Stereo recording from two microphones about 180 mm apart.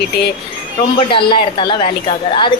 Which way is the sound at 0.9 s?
30° left (ahead or behind).